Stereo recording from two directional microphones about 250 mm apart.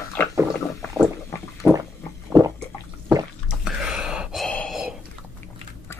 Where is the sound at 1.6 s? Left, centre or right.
Centre.